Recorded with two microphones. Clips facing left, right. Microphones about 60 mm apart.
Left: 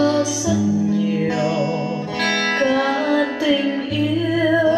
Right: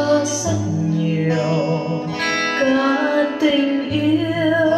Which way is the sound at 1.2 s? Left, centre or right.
Right.